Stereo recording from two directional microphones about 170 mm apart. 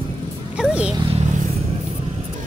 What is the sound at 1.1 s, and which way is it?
Vehicle, 40° right (ahead or behind).